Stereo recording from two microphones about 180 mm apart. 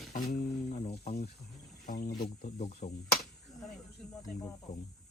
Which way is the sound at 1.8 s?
60° left (ahead or behind).